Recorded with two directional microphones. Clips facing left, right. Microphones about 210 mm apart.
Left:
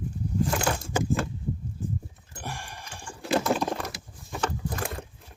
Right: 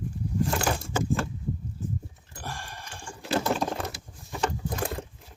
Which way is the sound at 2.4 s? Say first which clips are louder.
Left 1 dB; 15° left (ahead or behind).